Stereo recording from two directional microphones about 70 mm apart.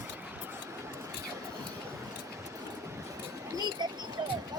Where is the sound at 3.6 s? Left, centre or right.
Right.